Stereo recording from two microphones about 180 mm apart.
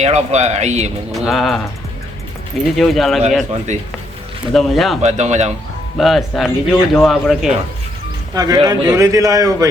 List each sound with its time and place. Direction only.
0.0 s speech: 40° right (ahead or behind)
1.1 s speech: centre (ahead or behind)
2.7 s speech: centre (ahead or behind)
3.7 s speech: 40° right (ahead or behind)
4.5 s speech: centre (ahead or behind)
5.0 s speech: 40° right (ahead or behind)
6.0 s speech: centre (ahead or behind)
8.3 s a man's voice: 20° right (ahead or behind)